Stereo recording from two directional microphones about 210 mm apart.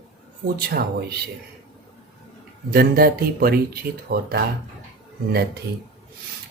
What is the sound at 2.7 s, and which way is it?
Speech, 45° right (ahead or behind).